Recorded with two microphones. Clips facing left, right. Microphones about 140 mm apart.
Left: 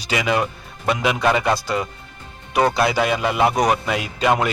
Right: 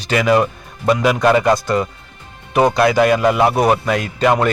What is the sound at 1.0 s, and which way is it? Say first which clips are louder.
Speech: right 4 dB; centre (ahead or behind).